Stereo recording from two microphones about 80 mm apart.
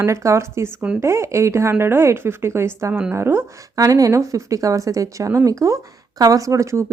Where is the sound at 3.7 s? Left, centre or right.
Right.